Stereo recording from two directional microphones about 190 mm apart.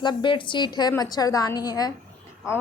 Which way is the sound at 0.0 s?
25° left (ahead or behind).